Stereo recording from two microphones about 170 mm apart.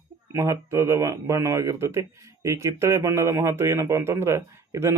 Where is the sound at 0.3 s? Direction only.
15° right (ahead or behind).